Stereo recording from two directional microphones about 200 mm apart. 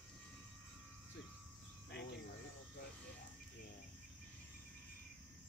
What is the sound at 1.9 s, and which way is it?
Cricket, 55° left (ahead or behind).